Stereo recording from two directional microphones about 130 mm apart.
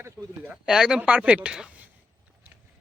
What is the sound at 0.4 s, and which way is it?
Speech, 5° right (ahead or behind).